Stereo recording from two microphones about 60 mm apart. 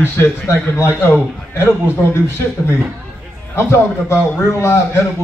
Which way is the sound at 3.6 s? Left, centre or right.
Left.